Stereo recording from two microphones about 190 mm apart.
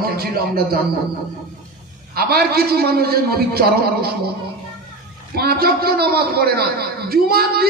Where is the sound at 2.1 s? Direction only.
55° right (ahead or behind).